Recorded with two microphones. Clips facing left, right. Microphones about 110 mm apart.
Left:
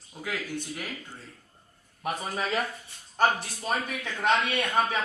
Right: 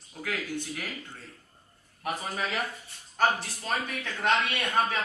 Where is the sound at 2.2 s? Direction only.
20° left (ahead or behind).